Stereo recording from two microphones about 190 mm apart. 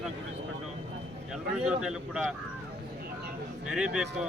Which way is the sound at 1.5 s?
5° right (ahead or behind).